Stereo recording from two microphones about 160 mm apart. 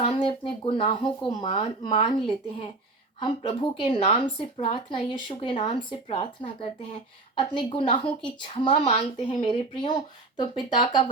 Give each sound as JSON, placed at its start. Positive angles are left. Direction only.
{"t": 0.0, "sound": "a woman's voice", "side_deg": 35}
{"t": 3.2, "sound": "a woman's voice", "side_deg": 30}